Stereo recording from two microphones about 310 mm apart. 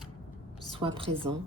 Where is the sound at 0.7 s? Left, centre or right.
Centre.